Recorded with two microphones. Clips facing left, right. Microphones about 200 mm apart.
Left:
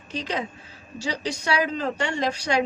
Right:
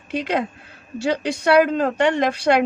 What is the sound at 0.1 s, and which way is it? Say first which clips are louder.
A woman's voice: right 7 dB; 55° right (ahead or behind).